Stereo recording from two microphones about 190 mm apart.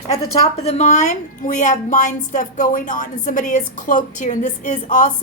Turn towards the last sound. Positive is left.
turn(degrees=40)  # may be behind; listen again after turning